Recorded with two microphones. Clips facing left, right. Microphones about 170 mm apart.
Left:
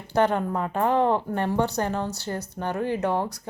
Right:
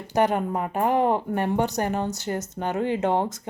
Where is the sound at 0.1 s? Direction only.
15° right (ahead or behind).